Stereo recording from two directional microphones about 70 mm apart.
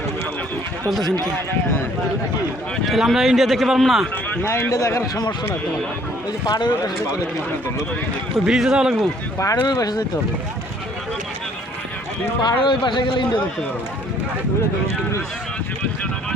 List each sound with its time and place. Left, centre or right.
2.8 s a man's voice: centre
4.4 s a man's voice: left
6.4 s speech: left
8.4 s a man's voice: centre
9.6 s speech: left
12.4 s speech: left